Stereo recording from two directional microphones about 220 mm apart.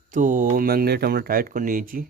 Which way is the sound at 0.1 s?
35° right (ahead or behind).